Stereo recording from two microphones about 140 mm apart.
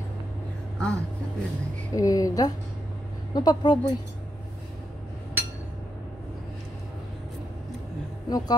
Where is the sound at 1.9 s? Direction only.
25° left (ahead or behind).